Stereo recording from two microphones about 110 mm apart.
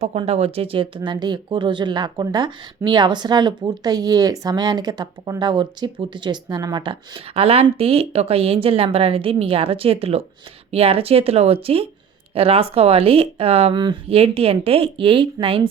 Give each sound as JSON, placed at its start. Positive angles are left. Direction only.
{"t": 0.3, "sound": "speech", "side_deg": -65}
{"t": 7.3, "sound": "a woman's voice", "side_deg": -65}
{"t": 13.7, "sound": "speech", "side_deg": -45}
{"t": 14.1, "sound": "a woman's voice", "side_deg": -60}